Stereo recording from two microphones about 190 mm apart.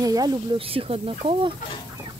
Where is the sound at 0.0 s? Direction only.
20° right (ahead or behind).